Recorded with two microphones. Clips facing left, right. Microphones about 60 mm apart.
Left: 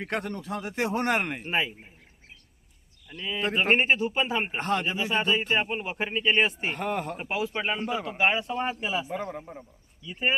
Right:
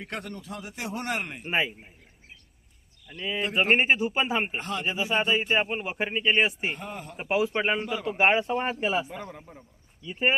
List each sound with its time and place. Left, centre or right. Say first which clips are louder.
0.0 s a man's voice: left 5 dB; left
1.5 s speech: right 5 dB; centre
3.1 s speech: even; centre
4.5 s a man's voice: left 4 dB; left
5.1 s speech: right 1 dB; centre
6.7 s speech: left 8 dB; left
7.2 s speech: right 4 dB; centre
9.0 s a man's voice: left 6 dB; centre
10.1 s speech: right 2 dB; centre